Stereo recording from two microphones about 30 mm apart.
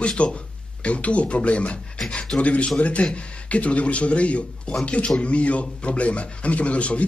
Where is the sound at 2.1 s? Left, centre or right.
Left.